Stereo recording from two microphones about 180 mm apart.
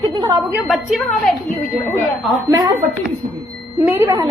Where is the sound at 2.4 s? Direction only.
20° right (ahead or behind).